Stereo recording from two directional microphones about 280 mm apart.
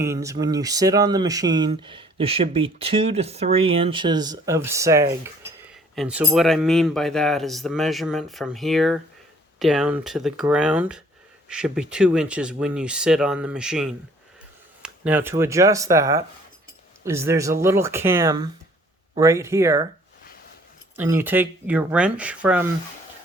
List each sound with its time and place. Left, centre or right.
0.0 s speech: centre
20.9 s speech: centre